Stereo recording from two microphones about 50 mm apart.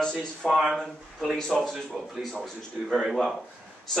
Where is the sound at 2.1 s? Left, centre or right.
Centre.